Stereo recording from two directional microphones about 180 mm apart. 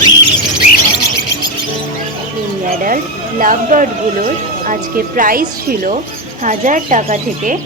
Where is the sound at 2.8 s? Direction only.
50° right (ahead or behind).